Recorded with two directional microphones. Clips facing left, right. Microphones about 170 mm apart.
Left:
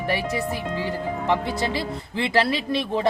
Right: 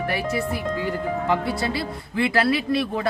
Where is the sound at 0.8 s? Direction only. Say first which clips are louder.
Right 2 dB; 25° left (ahead or behind).